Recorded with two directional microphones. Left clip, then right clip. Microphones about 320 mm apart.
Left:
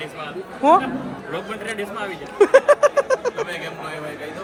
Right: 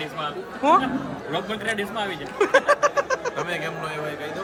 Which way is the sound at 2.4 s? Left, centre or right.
Centre.